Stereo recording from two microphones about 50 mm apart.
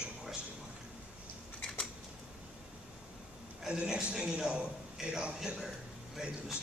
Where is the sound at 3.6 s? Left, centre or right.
Centre.